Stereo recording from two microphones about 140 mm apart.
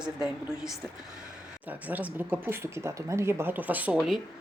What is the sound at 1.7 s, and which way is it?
A woman's voice, 10° right (ahead or behind).